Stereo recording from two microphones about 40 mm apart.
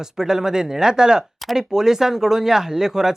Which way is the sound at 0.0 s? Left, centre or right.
Centre.